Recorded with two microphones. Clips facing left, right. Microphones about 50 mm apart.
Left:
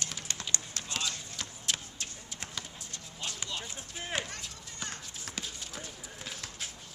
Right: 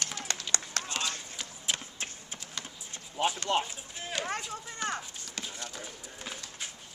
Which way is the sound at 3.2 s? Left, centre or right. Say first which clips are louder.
Right 12 dB; right.